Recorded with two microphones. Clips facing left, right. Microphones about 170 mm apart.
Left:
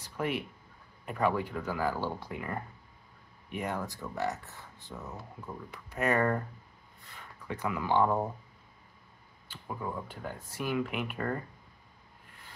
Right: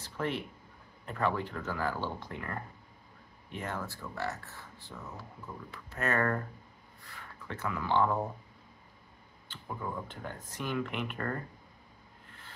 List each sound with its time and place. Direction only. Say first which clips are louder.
0.0 s a sound: left 1 dB; 10° left (ahead or behind)
1.0 s speech: left 2 dB; 10° left (ahead or behind)
9.5 s speech: left 1 dB; 10° left (ahead or behind)